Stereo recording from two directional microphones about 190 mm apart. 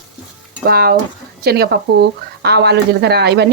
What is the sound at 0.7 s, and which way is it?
A woman's voice, 55° right (ahead or behind).